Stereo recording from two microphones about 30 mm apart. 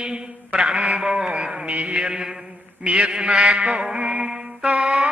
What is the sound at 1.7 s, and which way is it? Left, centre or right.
Mantra, right.